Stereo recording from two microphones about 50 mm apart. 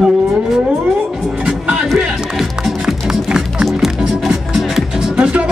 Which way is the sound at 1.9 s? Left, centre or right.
Centre.